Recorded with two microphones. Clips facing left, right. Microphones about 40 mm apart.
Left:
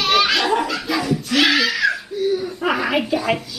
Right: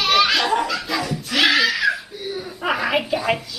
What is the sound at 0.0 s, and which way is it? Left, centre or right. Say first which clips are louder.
Belly laugh: even; centre.